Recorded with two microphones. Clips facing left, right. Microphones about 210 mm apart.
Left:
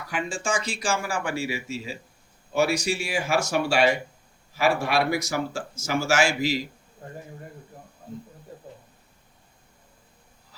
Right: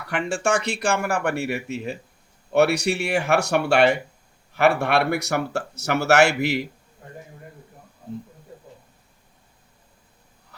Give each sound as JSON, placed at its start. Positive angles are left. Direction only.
{"t": 0.0, "sound": "speech", "side_deg": -70}